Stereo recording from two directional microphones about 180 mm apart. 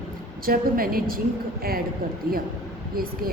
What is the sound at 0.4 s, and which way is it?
Speech, 55° right (ahead or behind).